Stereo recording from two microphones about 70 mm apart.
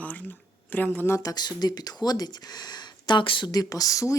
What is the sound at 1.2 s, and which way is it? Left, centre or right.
Speech, left.